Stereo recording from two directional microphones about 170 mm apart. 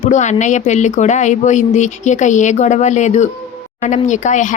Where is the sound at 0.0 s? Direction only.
45° left (ahead or behind).